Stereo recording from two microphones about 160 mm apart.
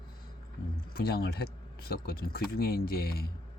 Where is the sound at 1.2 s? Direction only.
80° left.